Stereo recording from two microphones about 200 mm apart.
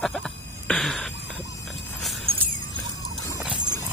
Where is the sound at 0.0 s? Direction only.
Centre (ahead or behind).